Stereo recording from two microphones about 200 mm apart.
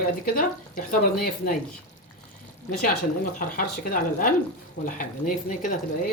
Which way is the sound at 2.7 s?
40° left (ahead or behind).